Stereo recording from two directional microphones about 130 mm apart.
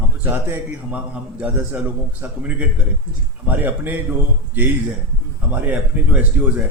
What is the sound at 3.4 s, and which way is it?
A man's voice, 15° right (ahead or behind).